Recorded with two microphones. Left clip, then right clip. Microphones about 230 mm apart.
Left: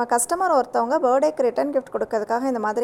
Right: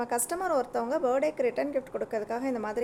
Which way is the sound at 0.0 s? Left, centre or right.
Left.